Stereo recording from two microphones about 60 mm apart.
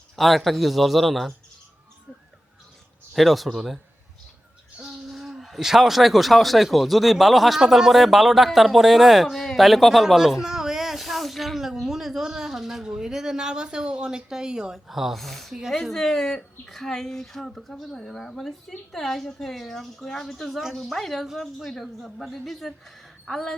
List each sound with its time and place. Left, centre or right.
0.2 s speech: centre
3.1 s speech: centre
4.8 s speech: centre